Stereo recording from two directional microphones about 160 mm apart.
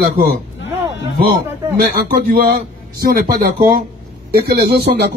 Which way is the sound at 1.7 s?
65° right (ahead or behind).